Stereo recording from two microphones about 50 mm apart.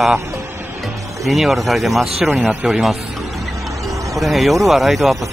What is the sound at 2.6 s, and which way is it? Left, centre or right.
Vehicle, centre.